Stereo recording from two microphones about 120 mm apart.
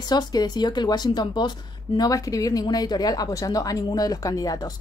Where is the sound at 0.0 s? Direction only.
35° left (ahead or behind).